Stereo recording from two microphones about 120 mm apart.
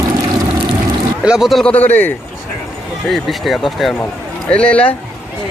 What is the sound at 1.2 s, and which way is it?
Speech, 5° right (ahead or behind).